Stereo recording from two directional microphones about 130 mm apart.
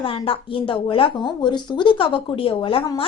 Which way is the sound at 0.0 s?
45° left (ahead or behind).